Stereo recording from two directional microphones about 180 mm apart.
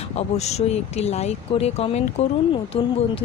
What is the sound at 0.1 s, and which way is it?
A woman's voice, 35° left (ahead or behind).